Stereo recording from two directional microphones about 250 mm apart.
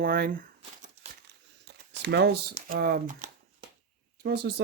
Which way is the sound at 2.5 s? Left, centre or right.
Right.